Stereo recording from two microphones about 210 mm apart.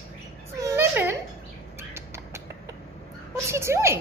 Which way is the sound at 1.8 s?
10° right (ahead or behind).